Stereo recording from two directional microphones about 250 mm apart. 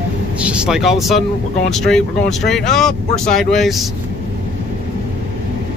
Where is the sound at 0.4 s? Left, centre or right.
Centre.